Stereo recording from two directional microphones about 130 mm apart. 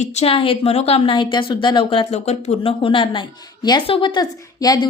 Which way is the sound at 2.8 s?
40° left (ahead or behind).